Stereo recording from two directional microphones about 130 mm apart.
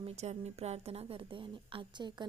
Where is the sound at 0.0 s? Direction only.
55° right (ahead or behind).